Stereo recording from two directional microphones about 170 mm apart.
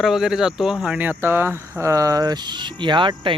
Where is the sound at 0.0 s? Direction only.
Centre (ahead or behind).